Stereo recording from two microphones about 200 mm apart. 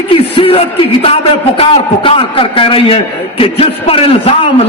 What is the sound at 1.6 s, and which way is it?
A man's voice, 25° left (ahead or behind).